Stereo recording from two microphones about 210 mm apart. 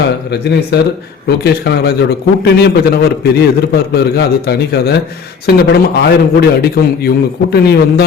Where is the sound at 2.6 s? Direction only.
50° left (ahead or behind).